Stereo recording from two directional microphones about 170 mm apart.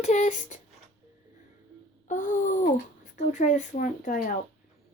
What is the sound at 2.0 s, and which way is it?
Speech, 50° left (ahead or behind).